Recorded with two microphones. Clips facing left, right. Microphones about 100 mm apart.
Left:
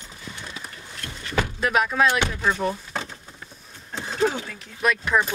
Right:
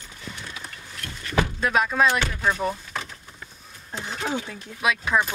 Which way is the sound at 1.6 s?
5° left (ahead or behind).